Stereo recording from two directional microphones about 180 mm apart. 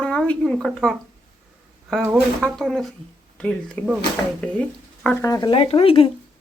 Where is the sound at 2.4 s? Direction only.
Centre (ahead or behind).